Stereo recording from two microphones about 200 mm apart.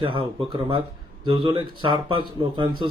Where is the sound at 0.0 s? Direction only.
25° right (ahead or behind).